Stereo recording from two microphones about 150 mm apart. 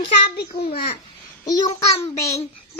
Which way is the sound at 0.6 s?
40° left (ahead or behind).